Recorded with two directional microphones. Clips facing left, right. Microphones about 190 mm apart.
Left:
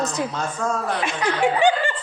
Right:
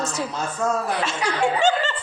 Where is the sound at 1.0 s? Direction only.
15° left (ahead or behind).